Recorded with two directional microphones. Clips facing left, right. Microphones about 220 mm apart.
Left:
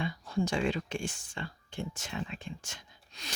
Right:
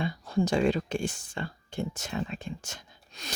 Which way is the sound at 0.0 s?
35° right (ahead or behind).